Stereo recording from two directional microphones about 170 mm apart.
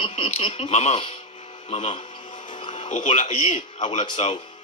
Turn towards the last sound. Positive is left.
turn(degrees=30)  # may be behind; listen again after turning